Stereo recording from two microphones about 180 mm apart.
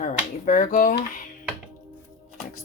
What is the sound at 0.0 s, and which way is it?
Speech, 45° left (ahead or behind).